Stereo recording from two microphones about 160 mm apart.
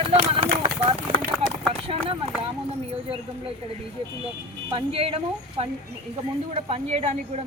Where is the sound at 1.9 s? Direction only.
35° right (ahead or behind).